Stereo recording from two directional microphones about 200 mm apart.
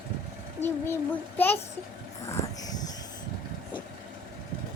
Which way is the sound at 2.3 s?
20° left (ahead or behind).